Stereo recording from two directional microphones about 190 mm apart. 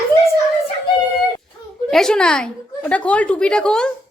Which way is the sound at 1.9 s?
Centre (ahead or behind).